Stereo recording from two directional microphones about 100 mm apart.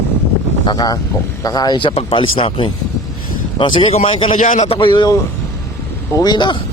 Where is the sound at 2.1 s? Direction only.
60° left (ahead or behind).